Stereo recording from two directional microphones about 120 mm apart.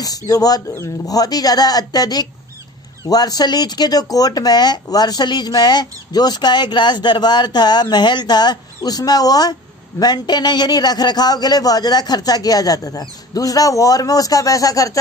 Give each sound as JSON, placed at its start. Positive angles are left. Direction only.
{"t": 0.3, "sound": "a man's voice", "side_deg": 30}